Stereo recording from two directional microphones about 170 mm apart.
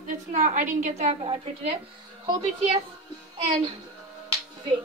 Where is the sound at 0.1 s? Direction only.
45° right (ahead or behind).